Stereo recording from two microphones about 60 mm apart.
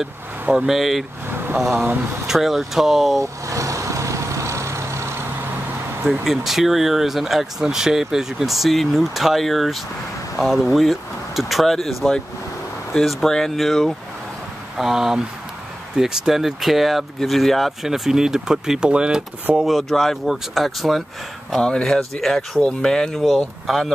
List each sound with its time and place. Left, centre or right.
0.7 s speech: centre
1.3 s vehicle: right
2.2 s speech: centre
3.2 s vehicle: right
6.2 s speech: centre
19.9 s speech: centre
21.5 s speech: centre